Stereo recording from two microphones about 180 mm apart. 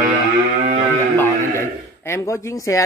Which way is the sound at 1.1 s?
15° left (ahead or behind).